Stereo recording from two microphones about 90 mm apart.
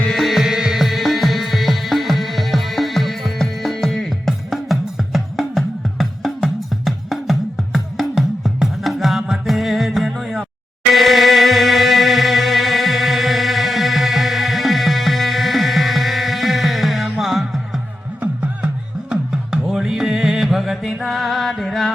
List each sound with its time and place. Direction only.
0.0 s music: 5° left (ahead or behind)
19.1 s music: 5° right (ahead or behind)